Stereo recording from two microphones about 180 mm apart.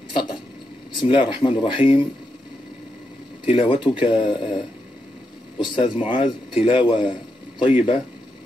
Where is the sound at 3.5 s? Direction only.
30° left (ahead or behind).